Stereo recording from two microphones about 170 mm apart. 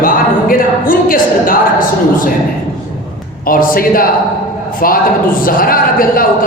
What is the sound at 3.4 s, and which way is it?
A man's voice, 55° left (ahead or behind).